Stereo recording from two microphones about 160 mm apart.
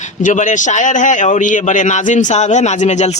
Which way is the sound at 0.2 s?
55° left (ahead or behind).